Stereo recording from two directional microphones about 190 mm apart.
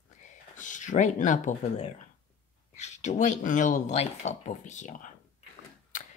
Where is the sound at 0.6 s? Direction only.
40° left (ahead or behind).